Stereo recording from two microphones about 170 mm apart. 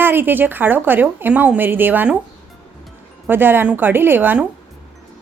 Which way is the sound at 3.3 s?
10° right (ahead or behind).